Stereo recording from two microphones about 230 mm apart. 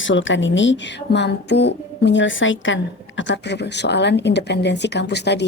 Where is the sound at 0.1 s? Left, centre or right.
Left.